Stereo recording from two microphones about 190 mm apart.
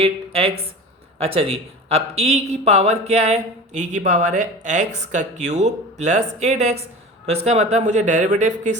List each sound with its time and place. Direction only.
0.0 s a man's voice: 30° right (ahead or behind)